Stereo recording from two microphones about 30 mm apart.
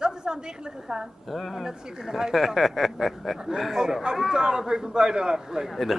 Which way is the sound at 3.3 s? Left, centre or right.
Centre.